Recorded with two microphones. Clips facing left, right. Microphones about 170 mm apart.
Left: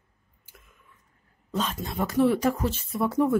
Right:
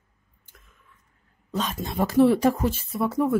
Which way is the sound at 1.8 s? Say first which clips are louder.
Right 5 dB; 30° right (ahead or behind).